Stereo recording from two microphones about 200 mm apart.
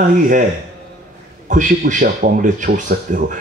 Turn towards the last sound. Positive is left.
turn(degrees=-45)  # may be behind; listen again after turning